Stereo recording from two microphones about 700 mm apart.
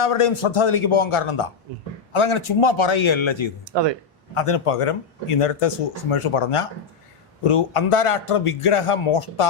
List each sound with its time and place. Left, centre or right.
0.0 s a man's voice: left
3.7 s speech: right
4.4 s speech: left